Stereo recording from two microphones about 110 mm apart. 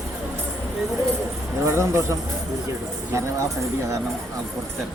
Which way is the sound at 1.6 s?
25° right (ahead or behind).